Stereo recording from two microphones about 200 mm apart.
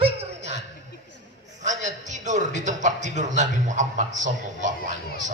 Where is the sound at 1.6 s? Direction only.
35° right (ahead or behind).